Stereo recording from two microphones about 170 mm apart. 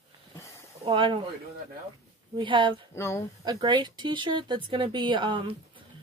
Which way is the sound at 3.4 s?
25° right (ahead or behind).